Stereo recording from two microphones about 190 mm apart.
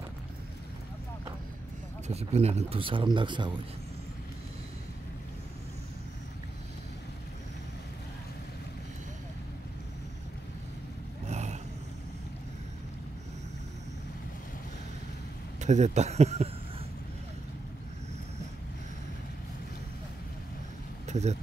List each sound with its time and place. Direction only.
2.0 s speech: 35° right (ahead or behind)
11.2 s vehicle: 35° right (ahead or behind)
15.6 s speech: 40° right (ahead or behind)
21.1 s speech: 35° right (ahead or behind)